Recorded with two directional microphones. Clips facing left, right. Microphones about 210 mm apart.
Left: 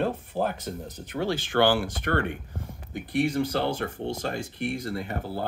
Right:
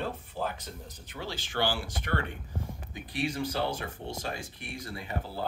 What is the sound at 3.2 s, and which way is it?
Speech, 55° left (ahead or behind).